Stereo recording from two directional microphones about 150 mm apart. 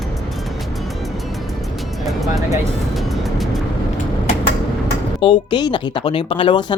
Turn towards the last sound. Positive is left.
turn(degrees=30)  # may be behind; listen again after turning